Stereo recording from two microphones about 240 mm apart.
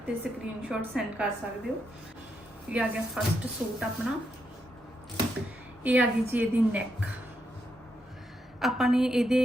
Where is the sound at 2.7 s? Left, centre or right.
Centre.